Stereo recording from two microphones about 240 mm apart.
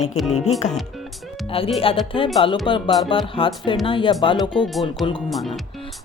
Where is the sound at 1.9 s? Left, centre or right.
Left.